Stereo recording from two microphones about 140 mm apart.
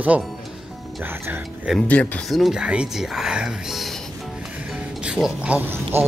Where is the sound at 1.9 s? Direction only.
10° left (ahead or behind).